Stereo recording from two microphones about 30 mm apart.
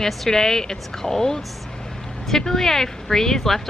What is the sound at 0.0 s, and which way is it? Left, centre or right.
Speech, centre.